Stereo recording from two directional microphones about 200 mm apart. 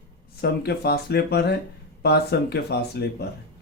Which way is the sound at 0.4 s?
50° left (ahead or behind).